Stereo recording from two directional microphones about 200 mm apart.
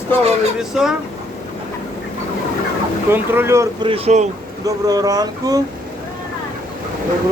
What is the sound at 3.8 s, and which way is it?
Speech, 30° right (ahead or behind).